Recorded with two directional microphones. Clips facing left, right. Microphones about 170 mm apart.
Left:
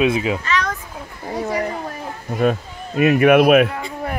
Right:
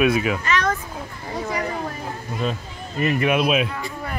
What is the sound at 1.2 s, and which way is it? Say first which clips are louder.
Speech: left 4 dB; 40° left (ahead or behind).